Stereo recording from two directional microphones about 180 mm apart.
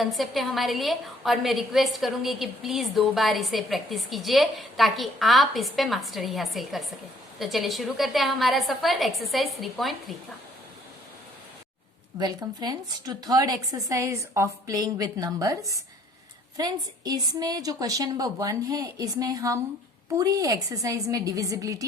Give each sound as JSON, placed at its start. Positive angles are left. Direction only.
{"t": 0.0, "sound": "a woman's voice", "side_deg": 0}
{"t": 12.2, "sound": "a woman's voice", "side_deg": -20}